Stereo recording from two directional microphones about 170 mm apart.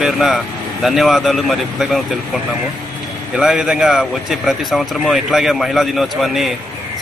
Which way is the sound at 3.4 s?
5° right (ahead or behind).